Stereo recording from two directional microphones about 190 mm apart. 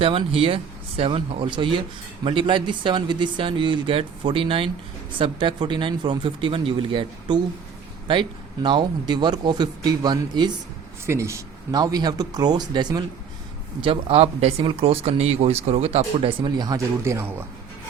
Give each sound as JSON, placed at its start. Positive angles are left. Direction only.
{"t": 0.0, "sound": "speech", "side_deg": -30}